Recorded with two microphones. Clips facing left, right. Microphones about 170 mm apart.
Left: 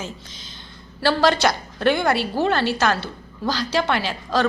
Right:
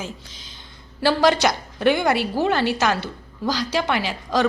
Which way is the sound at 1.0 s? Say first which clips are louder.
Right 1 dB; 15° right (ahead or behind).